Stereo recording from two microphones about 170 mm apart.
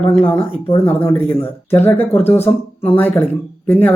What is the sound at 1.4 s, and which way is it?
Speech, 10° left (ahead or behind).